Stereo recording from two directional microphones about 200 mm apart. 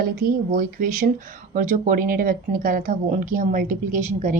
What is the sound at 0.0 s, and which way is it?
Speech, 45° right (ahead or behind).